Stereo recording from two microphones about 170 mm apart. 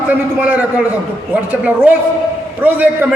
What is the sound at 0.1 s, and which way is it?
A man's voice, 10° right (ahead or behind).